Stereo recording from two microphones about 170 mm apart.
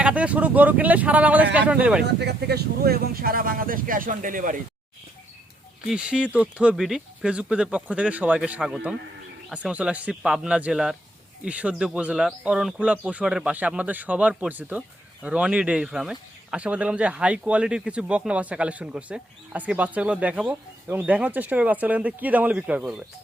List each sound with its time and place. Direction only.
0.0 s speech: 10° right (ahead or behind)
2.1 s speech: 75° right (ahead or behind); by 4.6 s 50° right (ahead or behind)
5.8 s speech: 5° right (ahead or behind)